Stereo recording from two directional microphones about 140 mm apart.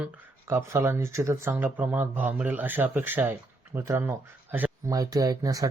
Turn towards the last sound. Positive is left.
turn(degrees=-25)  # may be behind; listen again after turning